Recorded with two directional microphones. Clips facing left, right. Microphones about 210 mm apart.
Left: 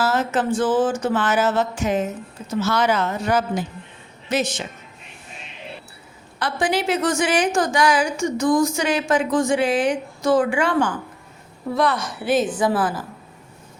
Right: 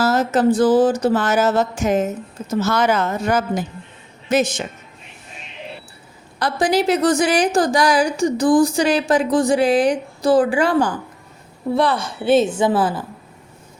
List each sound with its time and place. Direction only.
0.0 s a woman's voice: 40° right (ahead or behind)
6.4 s a woman's voice: 40° right (ahead or behind)